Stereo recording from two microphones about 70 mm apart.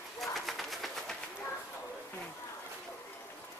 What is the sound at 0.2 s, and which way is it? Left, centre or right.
Train, centre.